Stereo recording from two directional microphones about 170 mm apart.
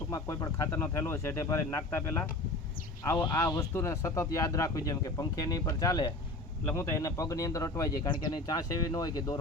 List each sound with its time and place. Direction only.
0.1 s speech: 20° left (ahead or behind)